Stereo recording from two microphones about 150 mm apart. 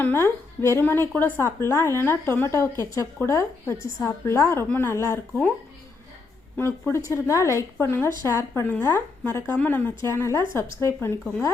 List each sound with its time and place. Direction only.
0.0 s a woman's voice: 15° left (ahead or behind)
6.6 s a woman's voice: 15° left (ahead or behind)